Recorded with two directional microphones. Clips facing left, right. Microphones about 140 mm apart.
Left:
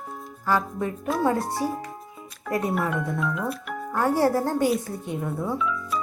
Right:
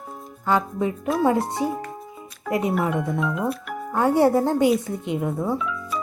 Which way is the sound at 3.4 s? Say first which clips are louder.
Right 4 dB; centre (ahead or behind).